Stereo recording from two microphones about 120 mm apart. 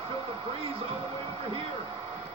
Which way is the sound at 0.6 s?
50° right (ahead or behind).